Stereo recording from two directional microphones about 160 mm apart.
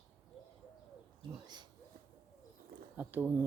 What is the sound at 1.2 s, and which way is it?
Bird, 25° right (ahead or behind).